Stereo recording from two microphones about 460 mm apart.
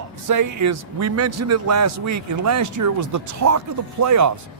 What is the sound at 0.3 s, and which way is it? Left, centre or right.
A man's voice, right.